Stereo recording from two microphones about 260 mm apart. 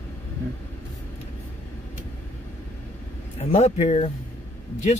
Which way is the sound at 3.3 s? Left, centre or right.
Left.